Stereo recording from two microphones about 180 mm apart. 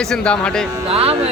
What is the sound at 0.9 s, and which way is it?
Speech, 30° right (ahead or behind).